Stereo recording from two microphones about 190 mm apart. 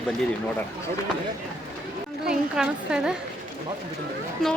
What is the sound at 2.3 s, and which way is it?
Speech, 5° right (ahead or behind).